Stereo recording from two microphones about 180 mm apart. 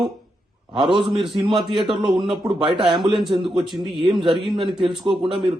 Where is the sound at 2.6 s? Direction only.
25° right (ahead or behind).